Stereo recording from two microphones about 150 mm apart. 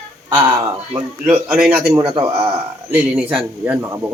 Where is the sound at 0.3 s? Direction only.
30° right (ahead or behind).